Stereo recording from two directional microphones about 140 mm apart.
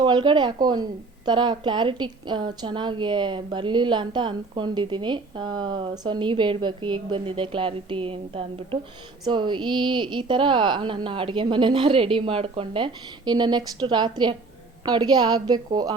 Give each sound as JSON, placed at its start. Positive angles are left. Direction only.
{"t": 0.0, "sound": "a woman's voice", "side_deg": -35}